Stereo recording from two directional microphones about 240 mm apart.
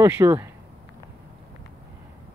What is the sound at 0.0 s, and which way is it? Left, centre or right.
Speech, centre.